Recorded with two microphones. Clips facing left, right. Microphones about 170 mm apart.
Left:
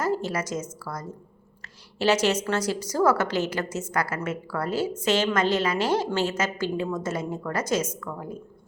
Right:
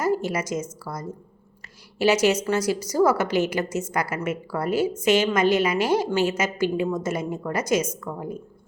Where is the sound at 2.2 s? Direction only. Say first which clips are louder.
Right 3 dB; 10° right (ahead or behind).